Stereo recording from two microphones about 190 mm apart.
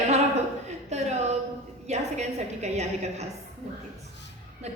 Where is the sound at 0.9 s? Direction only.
35° right (ahead or behind).